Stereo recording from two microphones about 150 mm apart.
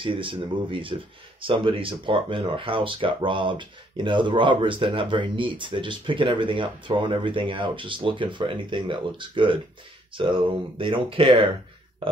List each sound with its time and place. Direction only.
0.0 s speech: 35° right (ahead or behind)